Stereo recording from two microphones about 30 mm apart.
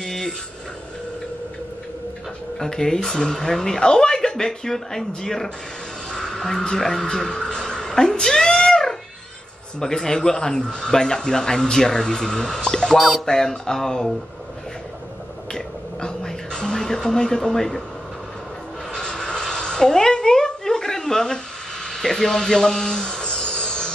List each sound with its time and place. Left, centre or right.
0.0 s a sound: centre
2.6 s speech: left
6.1 s music: left
6.6 s speech: centre
7.5 s a sound: left
9.8 s speech: centre
12.9 s speech: centre
13.2 s speech: left
15.5 s music: left
18.9 s a sound: left